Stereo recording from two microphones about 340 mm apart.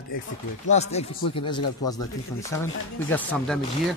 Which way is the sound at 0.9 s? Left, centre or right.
Centre.